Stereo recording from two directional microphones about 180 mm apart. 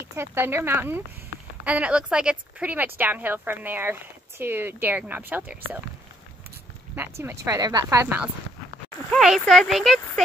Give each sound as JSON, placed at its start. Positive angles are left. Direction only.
{"t": 0.0, "sound": "speech", "side_deg": -15}
{"t": 7.0, "sound": "speech", "side_deg": -15}
{"t": 9.1, "sound": "speech", "side_deg": 0}